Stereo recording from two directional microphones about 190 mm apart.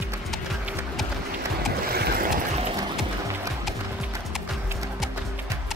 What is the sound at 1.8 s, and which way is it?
Stream, 55° right (ahead or behind).